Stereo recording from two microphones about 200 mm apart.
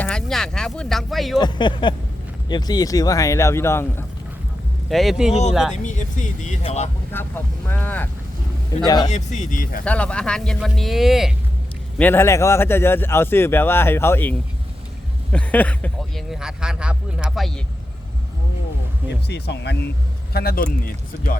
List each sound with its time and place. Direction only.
0.0 s speech: 5° left (ahead or behind)
1.4 s a man's voice: 20° left (ahead or behind)
4.9 s speech: centre (ahead or behind)
5.7 s speech: 35° left (ahead or behind)
7.1 s a man's voice: 10° left (ahead or behind)
9.0 s speech: 35° left (ahead or behind)
9.8 s speech: 5° left (ahead or behind)
11.9 s a man's voice: 10° left (ahead or behind)
19.3 s speech: 55° left (ahead or behind)